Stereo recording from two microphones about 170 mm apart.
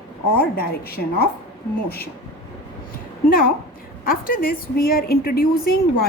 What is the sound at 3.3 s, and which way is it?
A woman's voice, 60° left (ahead or behind).